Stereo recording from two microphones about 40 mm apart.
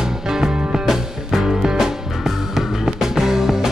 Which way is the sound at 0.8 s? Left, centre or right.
Centre.